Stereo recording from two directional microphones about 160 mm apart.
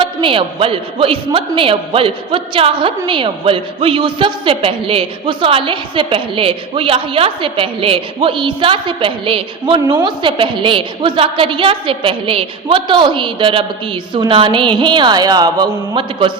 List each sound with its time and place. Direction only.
0.0 s speech: 30° right (ahead or behind)